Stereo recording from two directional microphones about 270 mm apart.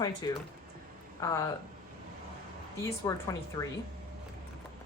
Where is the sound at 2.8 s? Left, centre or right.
Centre.